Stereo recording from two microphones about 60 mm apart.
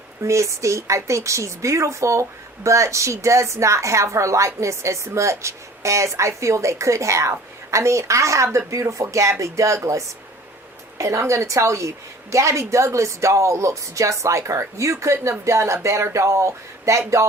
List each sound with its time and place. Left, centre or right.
0.2 s a woman's voice: right